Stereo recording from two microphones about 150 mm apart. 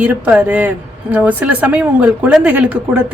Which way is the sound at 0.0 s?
10° right (ahead or behind).